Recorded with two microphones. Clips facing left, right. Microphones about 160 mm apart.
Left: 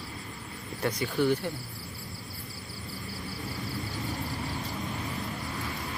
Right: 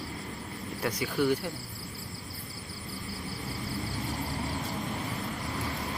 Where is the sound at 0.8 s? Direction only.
10° right (ahead or behind).